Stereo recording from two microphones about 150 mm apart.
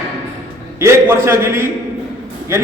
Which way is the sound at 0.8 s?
20° right (ahead or behind).